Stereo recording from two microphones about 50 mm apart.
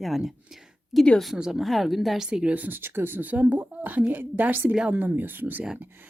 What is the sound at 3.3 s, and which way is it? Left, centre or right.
A woman's voice, right.